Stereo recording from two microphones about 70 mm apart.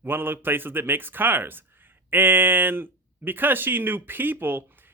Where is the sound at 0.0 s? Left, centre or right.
Right.